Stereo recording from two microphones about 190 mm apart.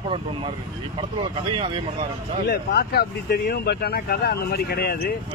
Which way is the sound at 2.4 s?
55° left (ahead or behind).